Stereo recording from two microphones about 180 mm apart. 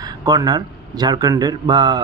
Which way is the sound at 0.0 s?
20° right (ahead or behind).